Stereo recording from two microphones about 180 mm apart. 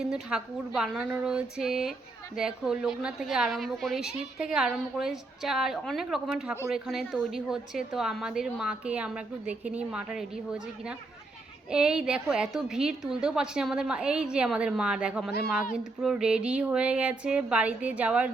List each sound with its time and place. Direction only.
0.0 s speech: 5° right (ahead or behind)
15.3 s speech: 60° left (ahead or behind)
16.0 s speech: centre (ahead or behind)